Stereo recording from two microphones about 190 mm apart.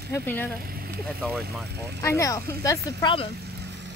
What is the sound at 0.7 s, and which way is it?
Vehicle, 50° right (ahead or behind).